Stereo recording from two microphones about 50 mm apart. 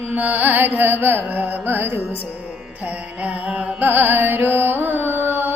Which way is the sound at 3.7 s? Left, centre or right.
Right.